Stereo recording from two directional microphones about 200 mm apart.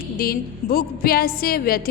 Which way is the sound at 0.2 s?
45° left (ahead or behind).